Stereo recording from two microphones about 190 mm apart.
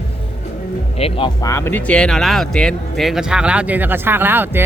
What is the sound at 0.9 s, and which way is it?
Speech, 30° left (ahead or behind).